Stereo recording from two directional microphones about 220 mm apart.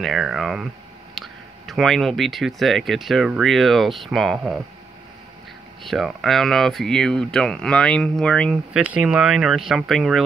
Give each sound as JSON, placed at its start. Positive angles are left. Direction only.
{"t": 0.0, "sound": "speech", "side_deg": 0}
{"t": 5.9, "sound": "speech", "side_deg": 0}